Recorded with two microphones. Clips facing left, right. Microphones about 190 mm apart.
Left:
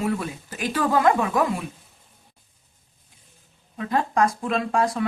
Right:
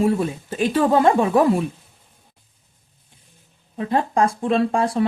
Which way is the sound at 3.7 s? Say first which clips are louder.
Right 3 dB; 30° right (ahead or behind).